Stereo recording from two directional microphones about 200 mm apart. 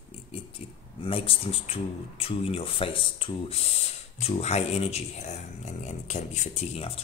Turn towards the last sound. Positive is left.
turn(degrees=30)  # may be behind; listen again after turning